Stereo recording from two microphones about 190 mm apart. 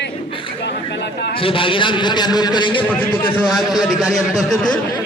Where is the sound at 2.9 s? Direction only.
10° left (ahead or behind).